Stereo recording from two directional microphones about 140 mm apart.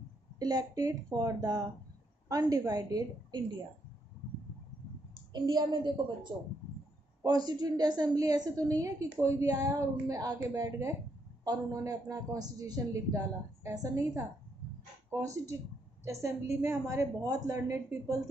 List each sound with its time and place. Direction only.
0.4 s a woman's voice: 25° right (ahead or behind)
5.3 s a woman's voice: 30° right (ahead or behind)
7.2 s a woman's voice: 30° right (ahead or behind)